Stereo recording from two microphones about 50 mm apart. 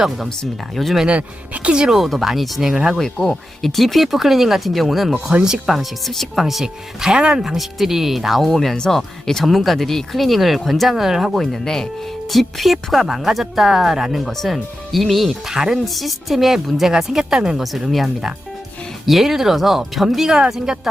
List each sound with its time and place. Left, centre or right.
1.0 s speech: right
2.0 s speech: centre
3.0 s speech: centre
5.3 s speech: centre
5.6 s speech: centre
11.6 s speech: centre